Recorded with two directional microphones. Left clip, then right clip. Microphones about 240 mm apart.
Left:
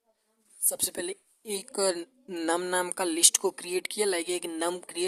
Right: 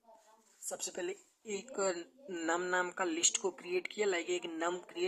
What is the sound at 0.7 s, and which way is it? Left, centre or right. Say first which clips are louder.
A woman's voice: left 6 dB; left.